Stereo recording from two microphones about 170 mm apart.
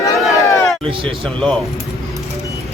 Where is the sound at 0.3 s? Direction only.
20° left (ahead or behind).